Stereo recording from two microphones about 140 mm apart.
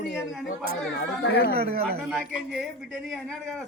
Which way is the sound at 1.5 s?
90° right.